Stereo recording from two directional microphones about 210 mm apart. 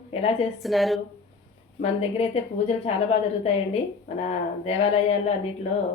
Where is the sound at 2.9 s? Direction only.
30° left (ahead or behind).